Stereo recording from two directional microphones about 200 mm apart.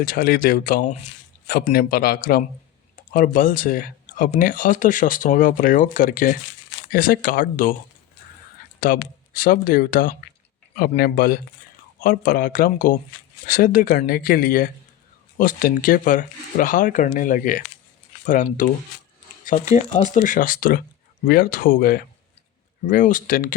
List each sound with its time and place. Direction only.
0.0 s speech: 45° left (ahead or behind)
8.8 s speech: 45° left (ahead or behind)
18.6 s speech: 40° left (ahead or behind)